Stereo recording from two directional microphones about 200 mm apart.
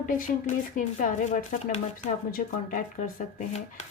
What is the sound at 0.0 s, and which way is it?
Speech, 40° left (ahead or behind).